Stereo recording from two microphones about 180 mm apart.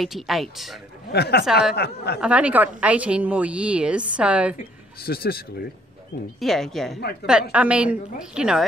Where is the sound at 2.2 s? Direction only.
5° right (ahead or behind).